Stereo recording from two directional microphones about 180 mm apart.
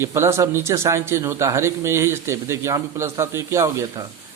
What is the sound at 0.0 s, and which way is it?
A man's voice, 15° right (ahead or behind).